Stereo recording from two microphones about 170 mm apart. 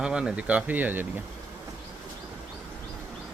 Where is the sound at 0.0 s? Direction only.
5° right (ahead or behind).